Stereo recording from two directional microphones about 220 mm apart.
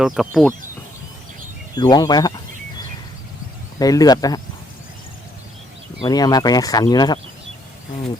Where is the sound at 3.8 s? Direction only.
15° left (ahead or behind).